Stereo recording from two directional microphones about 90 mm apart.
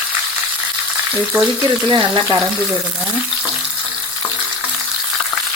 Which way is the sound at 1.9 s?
55° right (ahead or behind).